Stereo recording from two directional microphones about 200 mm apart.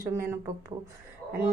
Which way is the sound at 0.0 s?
15° right (ahead or behind).